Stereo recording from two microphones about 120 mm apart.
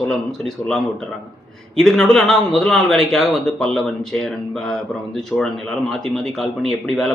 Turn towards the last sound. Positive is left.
turn(degrees=5)  # may be behind; listen again after turning